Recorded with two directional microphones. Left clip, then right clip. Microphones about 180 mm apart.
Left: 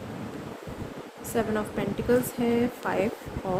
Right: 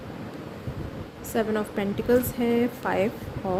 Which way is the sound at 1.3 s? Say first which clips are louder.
Right 2 dB; 25° right (ahead or behind).